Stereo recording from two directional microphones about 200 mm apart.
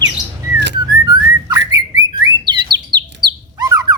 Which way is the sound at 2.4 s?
20° right (ahead or behind).